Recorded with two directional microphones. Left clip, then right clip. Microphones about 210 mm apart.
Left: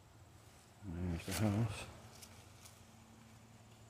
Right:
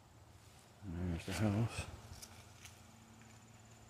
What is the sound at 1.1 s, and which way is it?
Speech, 10° left (ahead or behind).